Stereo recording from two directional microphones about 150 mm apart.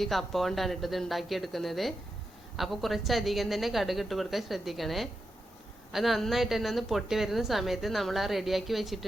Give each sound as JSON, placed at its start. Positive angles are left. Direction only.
{"t": 0.0, "sound": "a woman's voice", "side_deg": 0}